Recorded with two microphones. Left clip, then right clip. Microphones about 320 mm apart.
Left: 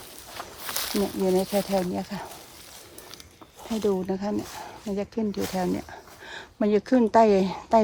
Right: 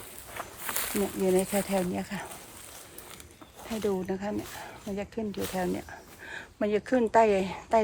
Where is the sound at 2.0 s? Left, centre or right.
Centre.